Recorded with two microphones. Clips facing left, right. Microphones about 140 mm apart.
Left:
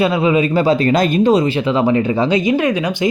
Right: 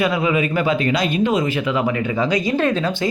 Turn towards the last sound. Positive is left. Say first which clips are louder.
# left 3 dB
turn(degrees=15)  # may be behind; listen again after turning